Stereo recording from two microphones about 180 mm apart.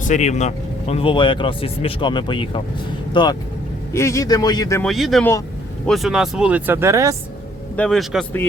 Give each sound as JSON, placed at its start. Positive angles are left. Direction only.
{"t": 0.1, "sound": "speech", "side_deg": 40}
{"t": 4.8, "sound": "speech", "side_deg": 0}
{"t": 7.8, "sound": "speech", "side_deg": 0}